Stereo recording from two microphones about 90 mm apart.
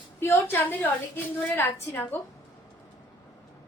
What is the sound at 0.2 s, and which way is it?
A woman's voice, 25° left (ahead or behind).